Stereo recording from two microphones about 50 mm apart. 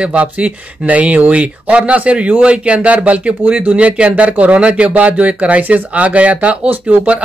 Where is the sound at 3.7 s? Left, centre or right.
Right.